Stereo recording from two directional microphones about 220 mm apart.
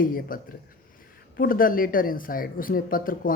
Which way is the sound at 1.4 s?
40° left (ahead or behind).